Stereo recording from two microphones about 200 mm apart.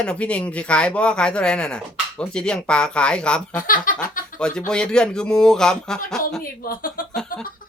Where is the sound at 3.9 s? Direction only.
45° left (ahead or behind).